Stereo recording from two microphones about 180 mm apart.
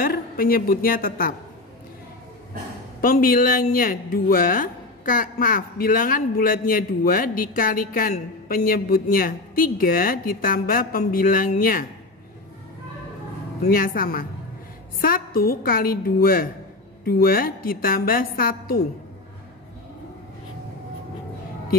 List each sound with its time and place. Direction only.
0.0 s a man's voice: 55° left (ahead or behind)
3.0 s a man's voice: 50° left (ahead or behind)
13.7 s a man's voice: 55° left (ahead or behind)